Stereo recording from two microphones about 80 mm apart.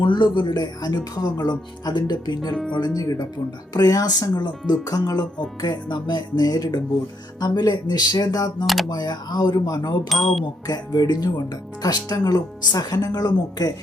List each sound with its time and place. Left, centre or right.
0.0 s speech: left
2.7 s speech: left
5.6 s speech: left
8.6 s speech: centre
8.9 s speech: left